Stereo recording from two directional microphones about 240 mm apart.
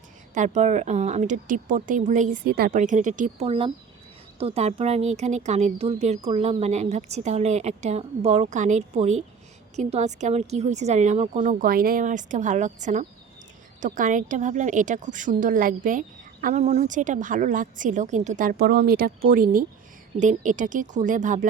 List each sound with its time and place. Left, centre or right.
0.3 s a woman's voice: right